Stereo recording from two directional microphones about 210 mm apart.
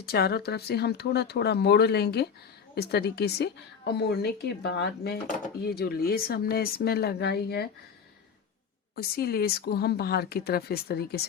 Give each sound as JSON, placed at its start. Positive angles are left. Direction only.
{"t": 0.0, "sound": "a woman's voice", "side_deg": 50}
{"t": 9.0, "sound": "a woman's voice", "side_deg": 45}